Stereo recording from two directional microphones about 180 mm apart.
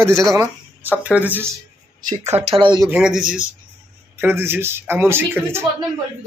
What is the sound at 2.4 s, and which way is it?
Speech, 30° right (ahead or behind).